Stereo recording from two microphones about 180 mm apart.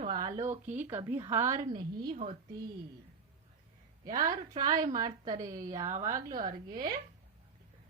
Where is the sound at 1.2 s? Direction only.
15° right (ahead or behind).